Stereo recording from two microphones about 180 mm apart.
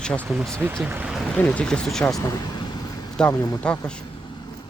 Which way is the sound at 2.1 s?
25° left (ahead or behind).